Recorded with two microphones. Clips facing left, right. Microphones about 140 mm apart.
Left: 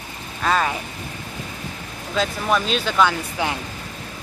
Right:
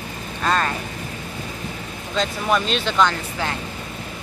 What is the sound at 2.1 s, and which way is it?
Speech, centre (ahead or behind).